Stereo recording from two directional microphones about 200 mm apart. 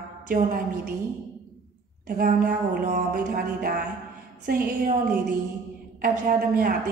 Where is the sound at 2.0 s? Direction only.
45° right (ahead or behind).